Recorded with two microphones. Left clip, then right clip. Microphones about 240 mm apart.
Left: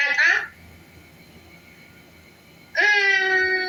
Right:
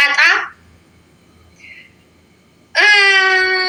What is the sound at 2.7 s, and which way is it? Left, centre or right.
Wail, right.